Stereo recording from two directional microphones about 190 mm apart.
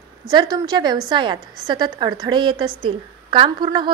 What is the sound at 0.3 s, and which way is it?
A woman's voice, 20° right (ahead or behind).